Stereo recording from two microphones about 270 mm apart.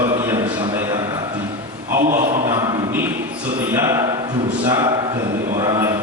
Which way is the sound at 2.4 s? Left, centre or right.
Centre.